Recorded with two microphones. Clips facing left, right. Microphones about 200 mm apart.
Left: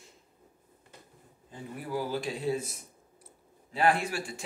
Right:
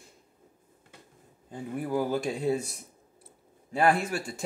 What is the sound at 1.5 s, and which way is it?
Speech, 50° right (ahead or behind).